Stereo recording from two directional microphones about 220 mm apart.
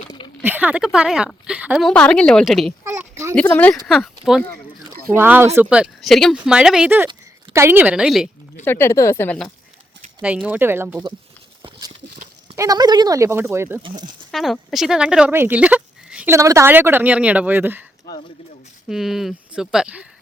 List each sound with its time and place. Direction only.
0.4 s speech: 5° right (ahead or behind)
2.8 s a sound: 10° right (ahead or behind)
3.4 s speech: 10° left (ahead or behind)
8.6 s speech: 10° left (ahead or behind)
10.2 s speech: 5° right (ahead or behind)
12.5 s speech: 15° right (ahead or behind)
14.3 s speech: centre (ahead or behind)
18.9 s speech: centre (ahead or behind)